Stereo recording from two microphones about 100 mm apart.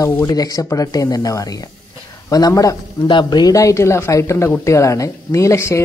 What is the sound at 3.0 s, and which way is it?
Speech, 50° left (ahead or behind).